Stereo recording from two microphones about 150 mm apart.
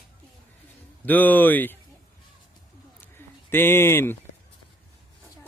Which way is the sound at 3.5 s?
15° left (ahead or behind).